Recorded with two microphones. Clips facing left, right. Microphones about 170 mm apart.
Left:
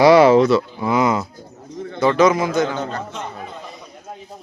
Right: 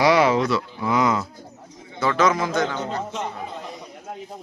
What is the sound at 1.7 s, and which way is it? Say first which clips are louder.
Bird: left 13 dB; 70° left (ahead or behind).